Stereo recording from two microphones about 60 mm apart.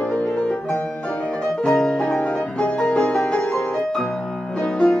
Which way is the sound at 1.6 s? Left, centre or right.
Centre.